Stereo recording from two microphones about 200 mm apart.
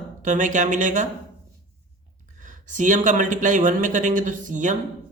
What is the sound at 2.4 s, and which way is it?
Speech, 40° right (ahead or behind).